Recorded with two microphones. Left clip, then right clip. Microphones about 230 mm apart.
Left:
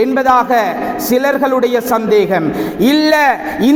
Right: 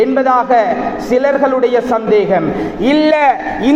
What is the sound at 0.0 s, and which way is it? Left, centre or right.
A man's voice, left.